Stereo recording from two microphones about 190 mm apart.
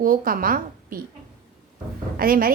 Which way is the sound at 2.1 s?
50° right (ahead or behind).